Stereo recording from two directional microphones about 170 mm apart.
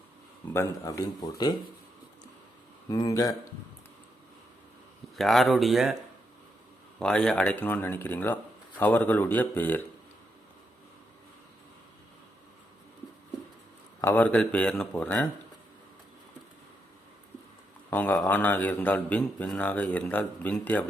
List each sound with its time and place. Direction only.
0.5 s speech: 15° left (ahead or behind)
2.9 s speech: 20° left (ahead or behind)
5.1 s speech: centre (ahead or behind)
7.0 s a man's voice: 5° left (ahead or behind)
14.0 s a man's voice: 10° left (ahead or behind)
17.9 s a man's voice: 10° left (ahead or behind)